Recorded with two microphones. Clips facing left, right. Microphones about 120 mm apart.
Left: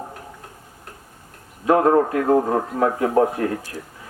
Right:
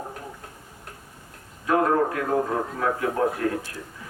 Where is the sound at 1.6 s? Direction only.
40° left (ahead or behind).